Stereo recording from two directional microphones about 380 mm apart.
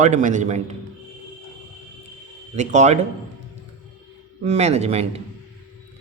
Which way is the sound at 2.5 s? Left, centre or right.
Centre.